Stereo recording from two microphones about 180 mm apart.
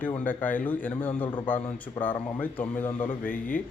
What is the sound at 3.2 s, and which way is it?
Speech, 50° left (ahead or behind).